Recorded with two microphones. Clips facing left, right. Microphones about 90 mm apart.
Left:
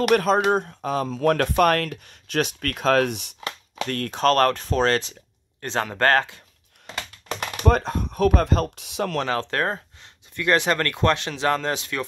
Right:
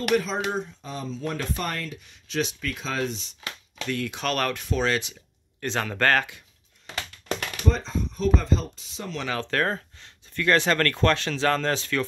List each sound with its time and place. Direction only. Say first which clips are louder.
0.1 s speech: left 5 dB; 55° left (ahead or behind); by 5.1 s 40° left (ahead or behind)
5.6 s speech: left 2 dB; 25° left (ahead or behind)
7.5 s speech: left 7 dB; 60° left (ahead or behind)
9.4 s speech: left 1 dB; 25° left (ahead or behind)